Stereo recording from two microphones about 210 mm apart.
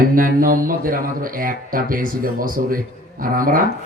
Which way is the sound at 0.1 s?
40° right (ahead or behind).